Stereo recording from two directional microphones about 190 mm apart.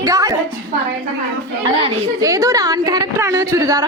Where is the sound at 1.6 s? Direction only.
20° right (ahead or behind).